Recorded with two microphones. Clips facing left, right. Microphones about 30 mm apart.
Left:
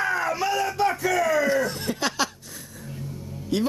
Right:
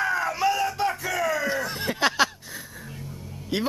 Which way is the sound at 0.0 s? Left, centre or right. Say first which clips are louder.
Right 1 dB; centre.